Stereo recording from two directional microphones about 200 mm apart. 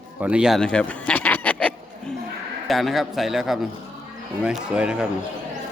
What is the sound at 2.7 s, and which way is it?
Speech, centre (ahead or behind).